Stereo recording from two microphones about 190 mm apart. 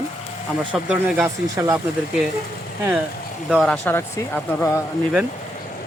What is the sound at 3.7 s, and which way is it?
Speech, 10° left (ahead or behind).